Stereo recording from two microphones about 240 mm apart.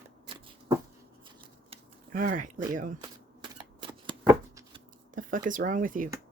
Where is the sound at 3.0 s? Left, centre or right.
Centre.